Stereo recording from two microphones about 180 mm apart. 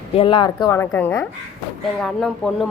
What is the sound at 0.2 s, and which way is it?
Speech, 30° left (ahead or behind).